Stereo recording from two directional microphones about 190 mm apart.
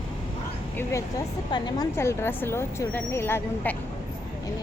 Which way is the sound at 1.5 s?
20° left (ahead or behind).